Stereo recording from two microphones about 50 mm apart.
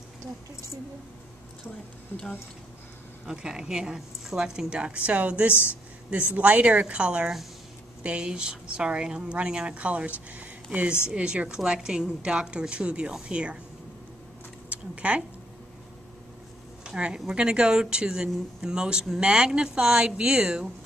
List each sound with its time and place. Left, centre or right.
3.3 s speech: centre
5.5 s speech: left
6.3 s speech: right
14.7 s speech: right
16.8 s speech: centre